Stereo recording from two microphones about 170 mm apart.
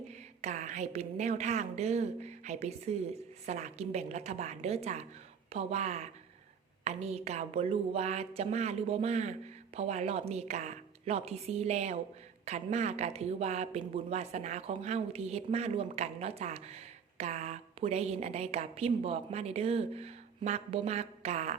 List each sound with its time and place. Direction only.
0.1 s speech: 45° right (ahead or behind)